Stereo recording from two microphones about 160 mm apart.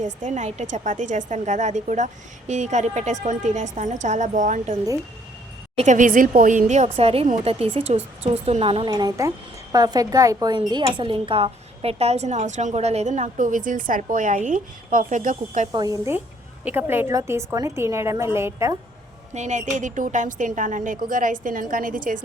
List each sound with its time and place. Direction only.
0.0 s a woman's voice: 50° right (ahead or behind)
5.7 s a woman's voice: 50° right (ahead or behind)
8.9 s a woman's voice: 20° right (ahead or behind); by 15.7 s 50° right (ahead or behind)
15.7 s a woman's voice: 20° right (ahead or behind)
19.3 s a woman's voice: 45° right (ahead or behind)